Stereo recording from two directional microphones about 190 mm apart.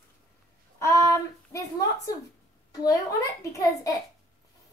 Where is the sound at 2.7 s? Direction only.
15° left (ahead or behind).